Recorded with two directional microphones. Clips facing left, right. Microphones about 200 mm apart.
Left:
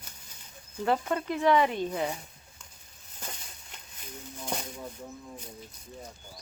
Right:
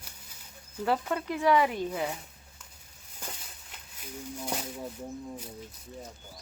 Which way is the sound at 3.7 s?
10° right (ahead or behind).